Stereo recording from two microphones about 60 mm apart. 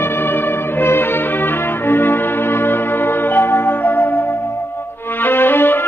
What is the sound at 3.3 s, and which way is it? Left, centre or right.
Music, left.